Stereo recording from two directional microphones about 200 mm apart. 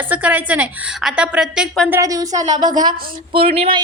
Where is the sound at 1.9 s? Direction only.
15° right (ahead or behind).